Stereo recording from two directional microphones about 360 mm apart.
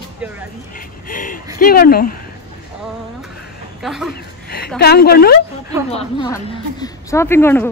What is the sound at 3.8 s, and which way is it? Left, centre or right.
Speech, centre.